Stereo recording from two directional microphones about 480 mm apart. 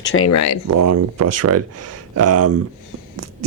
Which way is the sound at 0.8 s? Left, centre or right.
Right.